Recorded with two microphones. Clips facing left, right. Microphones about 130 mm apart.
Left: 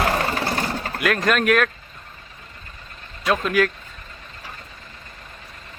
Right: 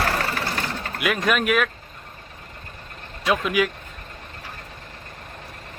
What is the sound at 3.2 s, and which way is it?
Speech, 10° right (ahead or behind).